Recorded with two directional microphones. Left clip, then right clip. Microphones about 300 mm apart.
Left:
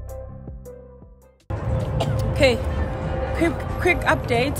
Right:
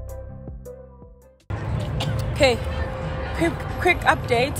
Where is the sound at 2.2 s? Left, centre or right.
Centre.